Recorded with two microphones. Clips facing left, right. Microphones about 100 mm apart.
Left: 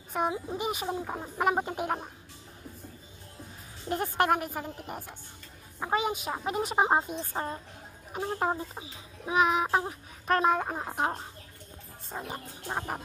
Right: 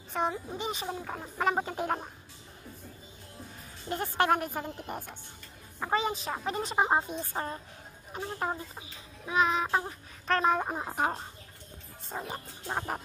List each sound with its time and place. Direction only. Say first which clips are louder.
0.1 s speech: left 1 dB; 10° left (ahead or behind)
3.8 s a woman's voice: left 1 dB; centre (ahead or behind)
8.4 s a child's voice: left 3 dB; 20° left (ahead or behind); by 13.0 s centre (ahead or behind)